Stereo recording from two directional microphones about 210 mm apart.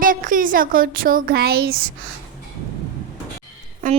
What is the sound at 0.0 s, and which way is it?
A woman's voice, 40° right (ahead or behind).